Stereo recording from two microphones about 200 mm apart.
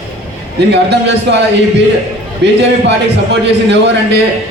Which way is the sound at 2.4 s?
60° right (ahead or behind).